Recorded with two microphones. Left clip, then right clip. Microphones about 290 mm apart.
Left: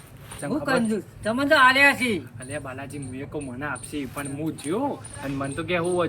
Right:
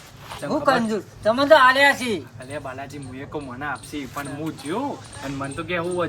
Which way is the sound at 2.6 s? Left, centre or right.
Centre.